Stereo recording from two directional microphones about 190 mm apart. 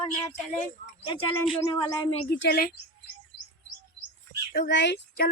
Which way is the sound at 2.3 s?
60° left (ahead or behind).